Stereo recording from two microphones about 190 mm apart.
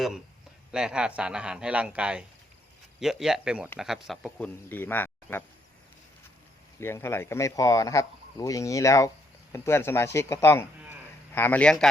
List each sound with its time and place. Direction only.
0.7 s a man's voice: 5° right (ahead or behind)
6.7 s speech: 15° left (ahead or behind)